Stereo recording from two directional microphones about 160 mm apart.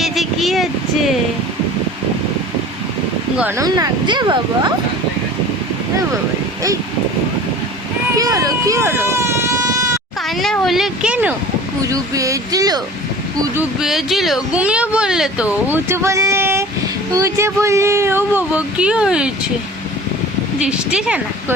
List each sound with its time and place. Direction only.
0.0 s a sound: centre (ahead or behind)
3.6 s speech: 20° right (ahead or behind)
8.1 s baby cry: 20° right (ahead or behind)
10.2 s speech: centre (ahead or behind)
11.9 s speech: 20° right (ahead or behind)
13.6 s speech: 5° right (ahead or behind)
20.7 s speech: 5° right (ahead or behind)